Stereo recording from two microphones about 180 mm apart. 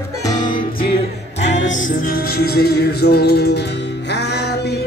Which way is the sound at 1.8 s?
55° left (ahead or behind).